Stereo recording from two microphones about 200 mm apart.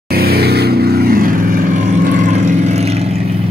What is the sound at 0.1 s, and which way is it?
Vehicle, 50° right (ahead or behind).